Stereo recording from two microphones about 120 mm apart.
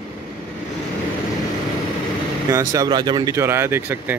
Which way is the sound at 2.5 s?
30° right (ahead or behind).